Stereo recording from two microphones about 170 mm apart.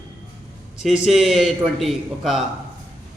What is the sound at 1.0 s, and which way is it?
A man's voice, centre (ahead or behind).